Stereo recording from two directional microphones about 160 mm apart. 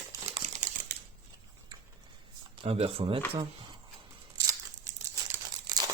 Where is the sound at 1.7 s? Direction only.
25° right (ahead or behind).